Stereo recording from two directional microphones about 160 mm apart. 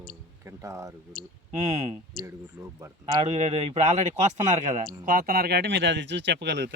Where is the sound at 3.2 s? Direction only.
45° right (ahead or behind).